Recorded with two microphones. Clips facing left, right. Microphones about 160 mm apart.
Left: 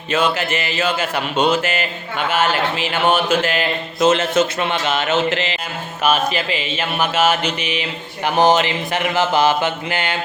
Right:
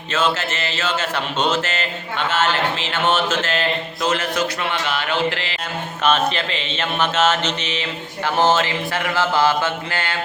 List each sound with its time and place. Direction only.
0.1 s mantra: 15° left (ahead or behind)
4.0 s speech: 25° left (ahead or behind)
6.0 s mantra: 10° left (ahead or behind)